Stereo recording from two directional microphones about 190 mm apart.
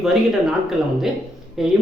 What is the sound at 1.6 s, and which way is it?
Speech, centre (ahead or behind).